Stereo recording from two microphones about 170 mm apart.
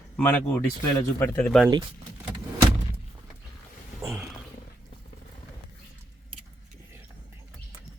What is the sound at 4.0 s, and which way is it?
Roaring cats, 15° right (ahead or behind).